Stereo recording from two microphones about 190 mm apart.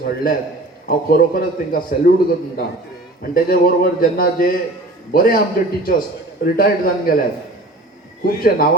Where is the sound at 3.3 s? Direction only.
50° left (ahead or behind).